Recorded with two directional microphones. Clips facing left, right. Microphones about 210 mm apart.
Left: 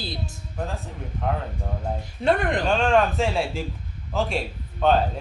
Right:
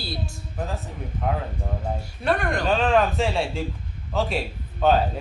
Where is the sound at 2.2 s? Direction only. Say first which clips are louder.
Left 2 dB; 20° left (ahead or behind).